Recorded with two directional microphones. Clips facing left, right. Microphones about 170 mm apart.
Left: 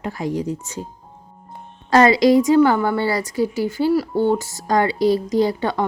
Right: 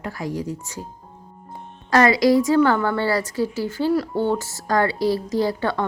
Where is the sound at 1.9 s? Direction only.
25° left (ahead or behind).